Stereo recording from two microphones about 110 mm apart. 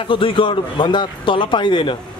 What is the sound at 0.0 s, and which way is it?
A man's voice, 50° left (ahead or behind).